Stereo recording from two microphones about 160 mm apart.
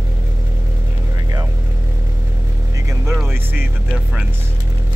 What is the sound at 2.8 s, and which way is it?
Vehicle, 20° right (ahead or behind).